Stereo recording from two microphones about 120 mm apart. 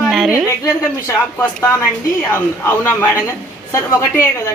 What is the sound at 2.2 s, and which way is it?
A man's voice, 15° left (ahead or behind).